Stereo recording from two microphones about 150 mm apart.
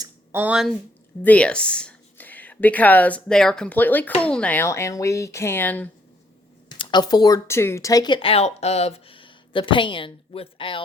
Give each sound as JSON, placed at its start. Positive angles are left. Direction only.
{"t": 0.3, "sound": "speech", "side_deg": -10}
{"t": 1.2, "sound": "speech", "side_deg": 10}
{"t": 6.7, "sound": "speech", "side_deg": 30}